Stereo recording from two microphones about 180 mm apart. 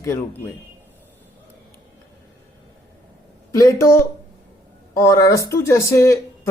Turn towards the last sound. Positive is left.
turn(degrees=15)  # may be behind; listen again after turning